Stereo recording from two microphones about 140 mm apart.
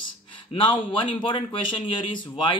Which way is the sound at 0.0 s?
35° left (ahead or behind).